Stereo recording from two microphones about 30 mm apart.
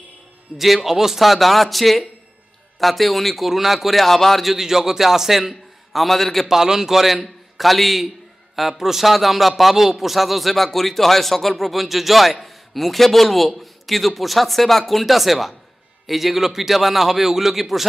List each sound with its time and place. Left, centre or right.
0.5 s a man's voice: centre
1.2 s a man's voice: centre
4.6 s a man's voice: centre
6.4 s a man's voice: centre
7.5 s a man's voice: centre
8.5 s a man's voice: centre